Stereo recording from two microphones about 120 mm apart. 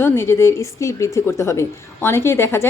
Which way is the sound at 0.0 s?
20° left (ahead or behind).